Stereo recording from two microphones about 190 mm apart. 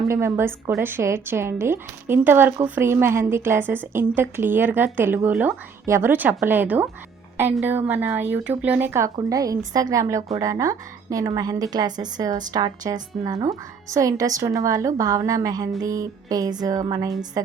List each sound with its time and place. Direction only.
0.1 s speech: 15° right (ahead or behind)
15.8 s music: 20° right (ahead or behind)
17.4 s speech: 15° right (ahead or behind)